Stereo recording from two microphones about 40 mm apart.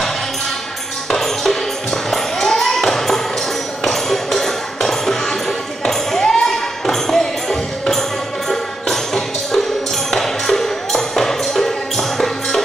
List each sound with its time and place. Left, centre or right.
1.1 s music: centre
5.9 s tambourine: centre
6.3 s a sound: centre
7.2 s music: centre